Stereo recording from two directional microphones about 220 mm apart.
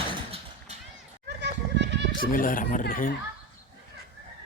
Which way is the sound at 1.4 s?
50° right (ahead or behind).